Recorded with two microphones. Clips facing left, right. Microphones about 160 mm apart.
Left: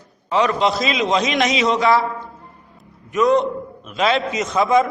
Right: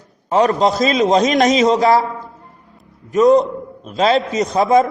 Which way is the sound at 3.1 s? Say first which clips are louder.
Right 5 dB; 40° right (ahead or behind).